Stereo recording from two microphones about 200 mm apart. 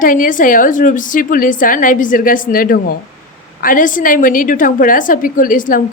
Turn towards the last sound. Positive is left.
turn(degrees=40)  # may be behind; listen again after turning